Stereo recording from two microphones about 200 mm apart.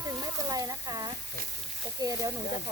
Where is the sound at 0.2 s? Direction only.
15° right (ahead or behind).